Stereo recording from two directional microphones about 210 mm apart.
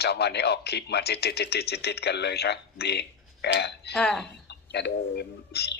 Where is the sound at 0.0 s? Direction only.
50° left (ahead or behind).